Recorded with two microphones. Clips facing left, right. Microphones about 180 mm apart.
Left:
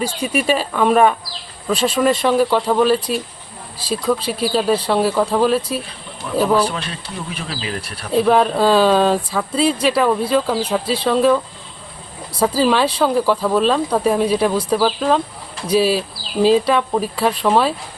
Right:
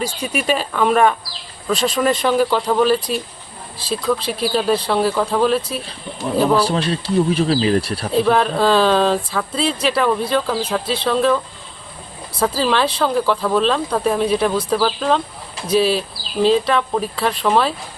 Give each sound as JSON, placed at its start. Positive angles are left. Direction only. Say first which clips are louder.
{"t": 0.3, "sound": "speech", "louder": "left 1 dB", "side_deg": 5}
{"t": 6.7, "sound": "speech", "louder": "right 8 dB", "side_deg": -35}
{"t": 8.3, "sound": "speech", "louder": "left 2 dB", "side_deg": 5}
{"t": 12.4, "sound": "speech", "louder": "left 2 dB", "side_deg": 10}